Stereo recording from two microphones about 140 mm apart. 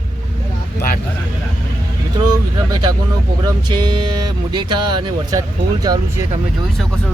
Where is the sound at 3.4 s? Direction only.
30° right (ahead or behind).